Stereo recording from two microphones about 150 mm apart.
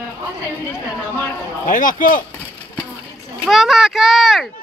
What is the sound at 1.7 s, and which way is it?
Speech, 60° left (ahead or behind).